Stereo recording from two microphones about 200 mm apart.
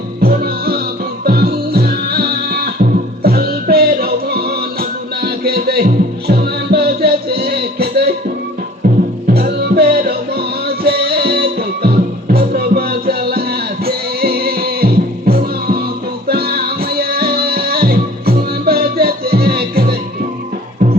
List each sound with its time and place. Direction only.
0.2 s music: 50° right (ahead or behind)
9.2 s music: 50° right (ahead or behind)